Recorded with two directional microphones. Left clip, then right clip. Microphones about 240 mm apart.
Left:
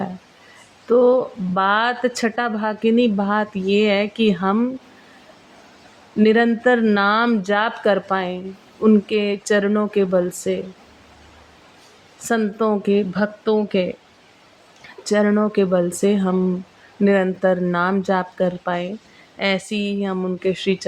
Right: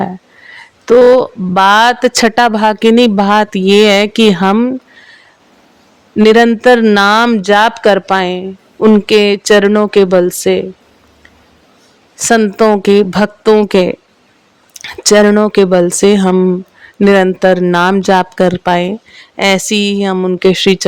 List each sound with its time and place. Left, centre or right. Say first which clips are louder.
0.9 s speech: right 10 dB; right
6.1 s speech: right 9 dB; right
12.2 s speech: right 11 dB; right